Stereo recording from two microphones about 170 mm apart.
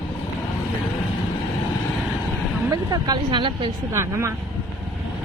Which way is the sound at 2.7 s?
25° right (ahead or behind).